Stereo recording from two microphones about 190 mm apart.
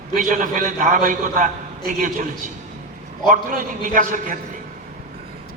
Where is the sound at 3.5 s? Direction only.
45° right (ahead or behind).